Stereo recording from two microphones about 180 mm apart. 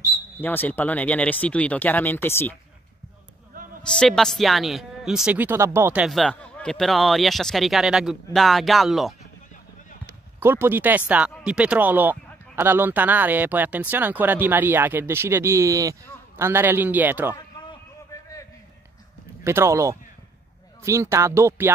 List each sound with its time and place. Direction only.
0.4 s speech: 10° left (ahead or behind)
3.8 s speech: 5° left (ahead or behind); by 6.0 s 15° right (ahead or behind)
6.0 s speech: centre (ahead or behind)
10.4 s speech: 10° right (ahead or behind)
17.4 s a sound: 20° left (ahead or behind)
19.4 s speech: 15° right (ahead or behind)